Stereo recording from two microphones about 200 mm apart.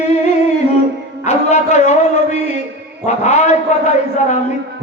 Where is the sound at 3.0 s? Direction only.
35° left (ahead or behind).